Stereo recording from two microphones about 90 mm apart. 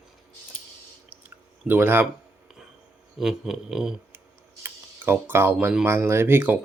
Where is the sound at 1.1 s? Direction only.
20° right (ahead or behind).